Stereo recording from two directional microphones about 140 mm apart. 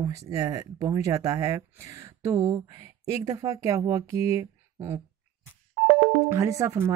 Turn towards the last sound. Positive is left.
turn(degrees=-20)  # may be behind; listen again after turning